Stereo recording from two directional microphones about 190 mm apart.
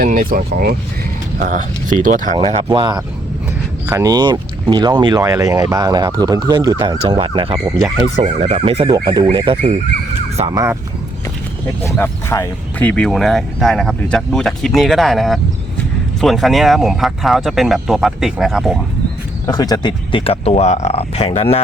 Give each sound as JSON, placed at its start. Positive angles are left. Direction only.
{"t": 0.0, "sound": "speech", "side_deg": -50}
{"t": 2.7, "sound": "speech", "side_deg": -25}
{"t": 8.1, "sound": "speech", "side_deg": -35}
{"t": 11.8, "sound": "speech", "side_deg": 10}
{"t": 19.5, "sound": "speech", "side_deg": 20}